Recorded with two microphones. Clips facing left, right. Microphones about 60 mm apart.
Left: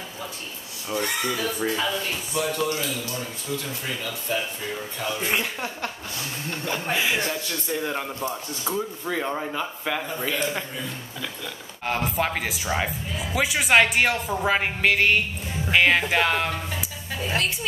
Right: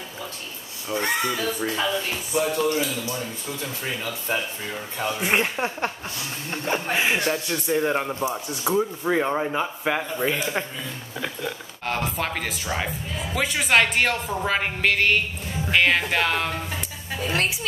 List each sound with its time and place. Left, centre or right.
0.9 s speech: right
1.3 s speech: centre
1.9 s speech: right
4.3 s speech: right
11.8 s speech: centre